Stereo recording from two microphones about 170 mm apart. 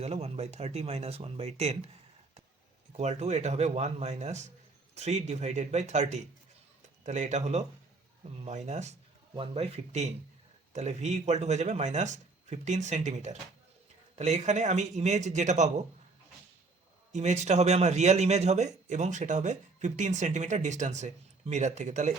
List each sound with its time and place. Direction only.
0.0 s speech: 40° right (ahead or behind)
17.1 s speech: 40° right (ahead or behind)